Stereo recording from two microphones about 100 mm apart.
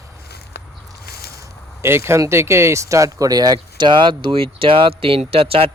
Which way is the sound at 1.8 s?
25° right (ahead or behind).